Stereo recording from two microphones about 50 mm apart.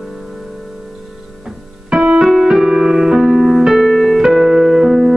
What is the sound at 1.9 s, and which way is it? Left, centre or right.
Keyboard, centre.